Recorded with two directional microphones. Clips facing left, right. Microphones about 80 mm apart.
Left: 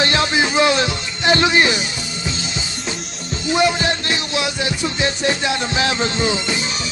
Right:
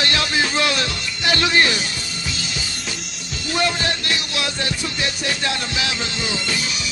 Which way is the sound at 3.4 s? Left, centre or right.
Centre.